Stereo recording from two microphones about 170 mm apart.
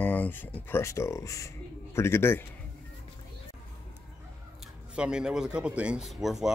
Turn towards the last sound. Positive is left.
turn(degrees=0)  # may be behind; listen again after turning